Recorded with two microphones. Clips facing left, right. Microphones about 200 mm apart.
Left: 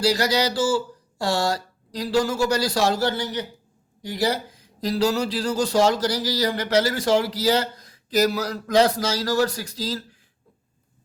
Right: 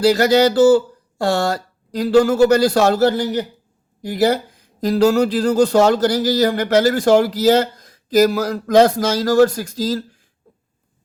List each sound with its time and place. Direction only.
0.0 s speech: 55° right (ahead or behind)
4.2 s speech: 55° right (ahead or behind)